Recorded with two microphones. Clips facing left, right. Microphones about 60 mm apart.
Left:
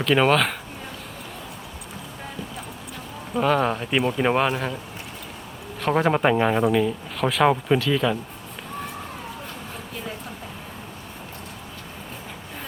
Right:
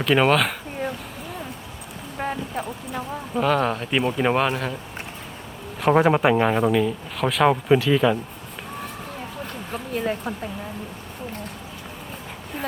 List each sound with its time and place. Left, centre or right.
0.0 s speech: centre
2.1 s clip-clop: right
3.3 s speech: centre
5.8 s speech: centre
9.9 s a sound: right